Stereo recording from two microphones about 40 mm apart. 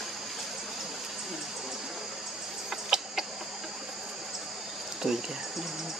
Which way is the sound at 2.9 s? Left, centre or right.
Centre.